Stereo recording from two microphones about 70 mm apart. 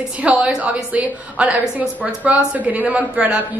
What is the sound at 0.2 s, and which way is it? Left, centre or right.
A woman's voice, centre.